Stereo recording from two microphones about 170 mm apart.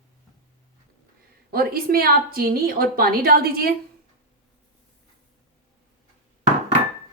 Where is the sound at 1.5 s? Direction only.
60° right (ahead or behind).